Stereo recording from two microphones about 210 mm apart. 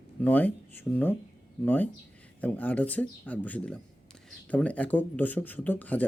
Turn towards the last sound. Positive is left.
turn(degrees=10)  # may be behind; listen again after turning